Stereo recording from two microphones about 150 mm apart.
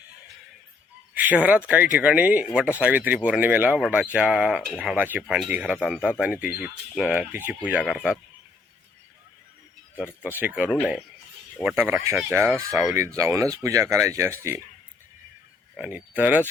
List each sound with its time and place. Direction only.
1.1 s speech: 10° right (ahead or behind)
9.9 s speech: 15° left (ahead or behind)
10.2 s speech: 10° right (ahead or behind)
11.8 s speech: 15° right (ahead or behind)
15.7 s speech: 10° right (ahead or behind)